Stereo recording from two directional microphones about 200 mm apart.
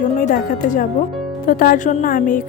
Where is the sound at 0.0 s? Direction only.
40° left (ahead or behind).